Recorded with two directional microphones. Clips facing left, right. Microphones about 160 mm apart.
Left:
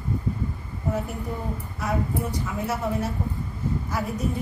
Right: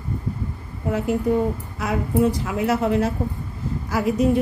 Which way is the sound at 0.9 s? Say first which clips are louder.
Right 8 dB; 90° right.